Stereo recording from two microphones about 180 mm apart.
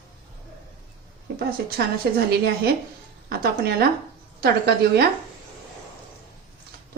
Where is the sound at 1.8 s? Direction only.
60° right (ahead or behind).